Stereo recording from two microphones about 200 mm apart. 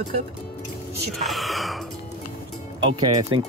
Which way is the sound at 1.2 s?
Centre (ahead or behind).